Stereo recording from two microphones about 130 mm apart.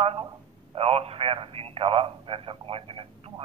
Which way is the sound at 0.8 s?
50° right (ahead or behind).